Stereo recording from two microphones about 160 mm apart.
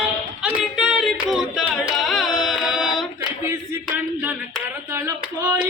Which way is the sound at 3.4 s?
15° right (ahead or behind).